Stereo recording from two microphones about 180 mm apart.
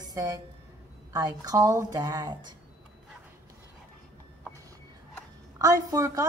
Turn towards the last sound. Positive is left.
turn(degrees=-20)  # may be behind; listen again after turning